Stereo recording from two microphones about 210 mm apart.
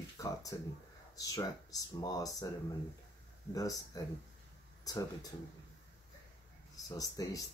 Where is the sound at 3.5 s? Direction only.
15° left (ahead or behind).